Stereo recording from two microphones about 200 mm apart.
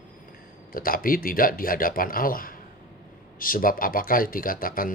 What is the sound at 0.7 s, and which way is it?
Speech, 45° left (ahead or behind).